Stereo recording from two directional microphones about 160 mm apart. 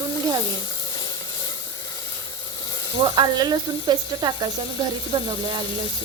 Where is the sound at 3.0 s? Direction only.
30° right (ahead or behind).